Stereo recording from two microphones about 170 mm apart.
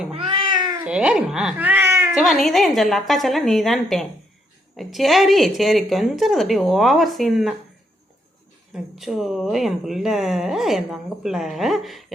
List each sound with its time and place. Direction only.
0.1 s cat: 30° right (ahead or behind)
0.9 s speech: 5° right (ahead or behind)
2.1 s speech: centre (ahead or behind)
8.7 s speech: centre (ahead or behind)